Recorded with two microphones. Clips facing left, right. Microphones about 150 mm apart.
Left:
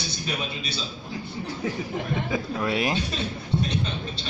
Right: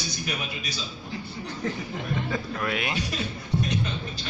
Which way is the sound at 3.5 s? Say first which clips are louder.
Left 1 dB; 25° left (ahead or behind).